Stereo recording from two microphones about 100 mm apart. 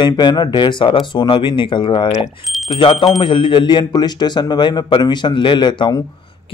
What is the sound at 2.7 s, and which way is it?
Speech, 55° left (ahead or behind).